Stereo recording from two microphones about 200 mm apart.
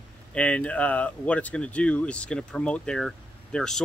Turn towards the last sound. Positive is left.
turn(degrees=0)  # may be behind; listen again after turning